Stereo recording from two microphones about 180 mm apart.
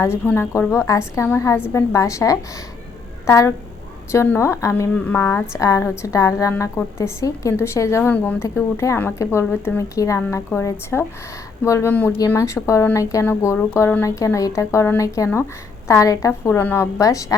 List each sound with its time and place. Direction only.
0.0 s a woman's voice: 15° left (ahead or behind)